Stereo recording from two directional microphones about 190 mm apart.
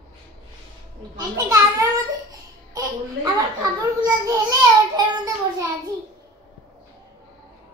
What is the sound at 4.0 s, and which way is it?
Child singing, 20° right (ahead or behind).